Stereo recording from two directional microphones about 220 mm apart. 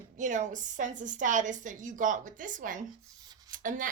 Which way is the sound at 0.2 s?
35° right (ahead or behind).